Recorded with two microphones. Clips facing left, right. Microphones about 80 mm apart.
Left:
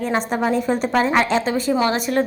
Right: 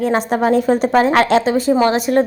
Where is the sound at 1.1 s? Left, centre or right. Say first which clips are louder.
Right 5 dB; right.